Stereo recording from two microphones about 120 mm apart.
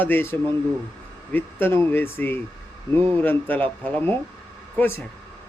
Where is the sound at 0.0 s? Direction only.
15° left (ahead or behind).